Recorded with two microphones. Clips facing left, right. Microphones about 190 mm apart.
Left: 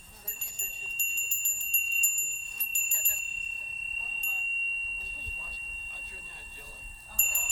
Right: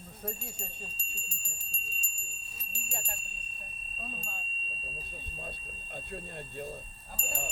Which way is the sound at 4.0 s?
50° right (ahead or behind).